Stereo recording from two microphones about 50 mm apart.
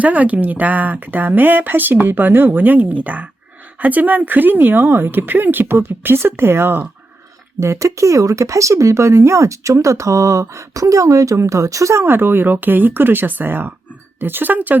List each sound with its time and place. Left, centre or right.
0.0 s a woman's voice: right
4.8 s speech: right
7.6 s speech: right
12.0 s a woman's voice: right